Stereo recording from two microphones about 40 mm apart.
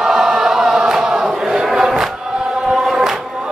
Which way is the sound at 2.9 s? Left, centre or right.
Centre.